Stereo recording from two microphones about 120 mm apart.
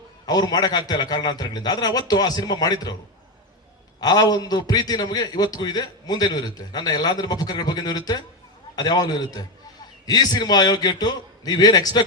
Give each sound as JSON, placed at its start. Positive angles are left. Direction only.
{"t": 0.3, "sound": "a man's voice", "side_deg": 35}
{"t": 4.0, "sound": "a man's voice", "side_deg": 35}